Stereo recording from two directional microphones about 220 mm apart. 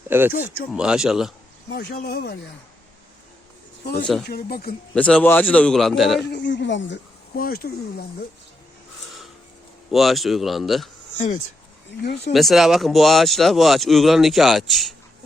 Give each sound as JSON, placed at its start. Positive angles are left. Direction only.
{"t": 0.1, "sound": "speech", "side_deg": -10}
{"t": 1.7, "sound": "speech", "side_deg": 45}
{"t": 4.0, "sound": "speech", "side_deg": 0}
{"t": 4.3, "sound": "speech", "side_deg": 45}
{"t": 4.9, "sound": "speech", "side_deg": 5}
{"t": 6.3, "sound": "speech", "side_deg": 55}
{"t": 9.0, "sound": "a sound", "side_deg": 0}
{"t": 9.9, "sound": "speech", "side_deg": 0}
{"t": 11.9, "sound": "speech", "side_deg": 50}
{"t": 12.3, "sound": "speech", "side_deg": 0}